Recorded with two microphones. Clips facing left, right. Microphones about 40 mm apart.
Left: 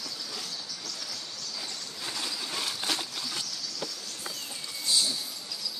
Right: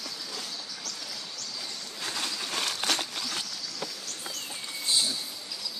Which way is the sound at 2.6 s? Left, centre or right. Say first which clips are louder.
Right 3 dB; right.